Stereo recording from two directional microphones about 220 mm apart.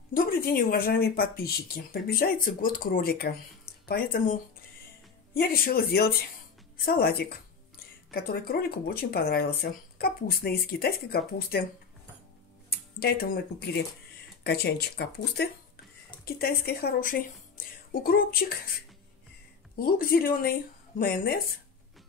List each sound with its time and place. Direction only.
0.1 s speech: 40° left (ahead or behind)
12.6 s speech: 45° left (ahead or behind)
19.7 s speech: 40° left (ahead or behind)